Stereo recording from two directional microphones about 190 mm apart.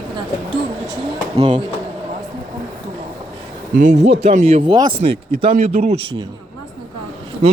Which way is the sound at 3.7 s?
40° right (ahead or behind).